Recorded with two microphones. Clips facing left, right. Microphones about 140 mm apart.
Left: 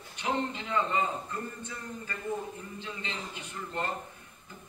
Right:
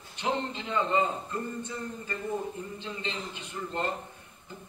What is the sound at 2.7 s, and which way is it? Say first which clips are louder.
Speech: right 3 dB; 20° right (ahead or behind).